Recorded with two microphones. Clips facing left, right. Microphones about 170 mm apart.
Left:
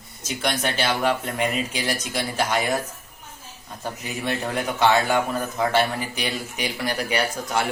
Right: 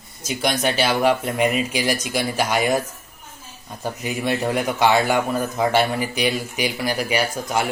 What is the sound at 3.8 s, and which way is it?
Speech, 10° right (ahead or behind).